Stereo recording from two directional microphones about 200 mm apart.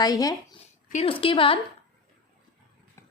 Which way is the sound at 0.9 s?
30° left (ahead or behind).